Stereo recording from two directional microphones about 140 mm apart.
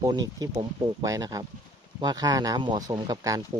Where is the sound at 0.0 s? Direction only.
25° right (ahead or behind).